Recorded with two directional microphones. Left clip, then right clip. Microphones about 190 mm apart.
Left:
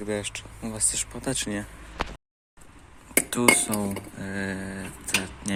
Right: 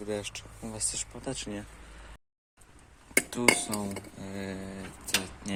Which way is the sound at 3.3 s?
Centre (ahead or behind).